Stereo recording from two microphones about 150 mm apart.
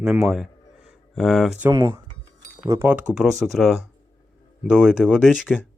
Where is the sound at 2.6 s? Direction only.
20° right (ahead or behind).